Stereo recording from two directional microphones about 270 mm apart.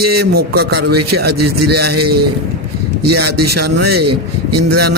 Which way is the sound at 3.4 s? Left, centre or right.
Right.